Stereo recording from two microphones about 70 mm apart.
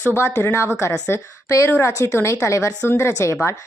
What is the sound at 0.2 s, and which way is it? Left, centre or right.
A woman's voice, left.